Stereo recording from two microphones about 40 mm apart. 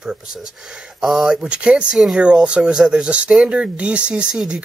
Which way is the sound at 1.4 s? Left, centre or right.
Right.